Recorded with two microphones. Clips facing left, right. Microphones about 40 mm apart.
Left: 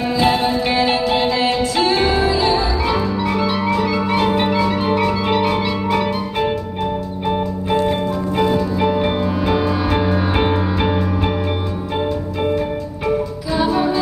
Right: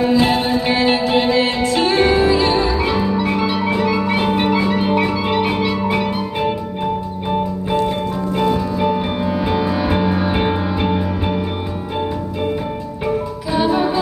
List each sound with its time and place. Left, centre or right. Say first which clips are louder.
0.1 s music: right 1 dB; centre
0.7 s music: right 1 dB; right
1.4 s music: even; right
2.5 s music: right 1 dB; centre
7.3 s music: right 1 dB; centre
13.0 s music: even; centre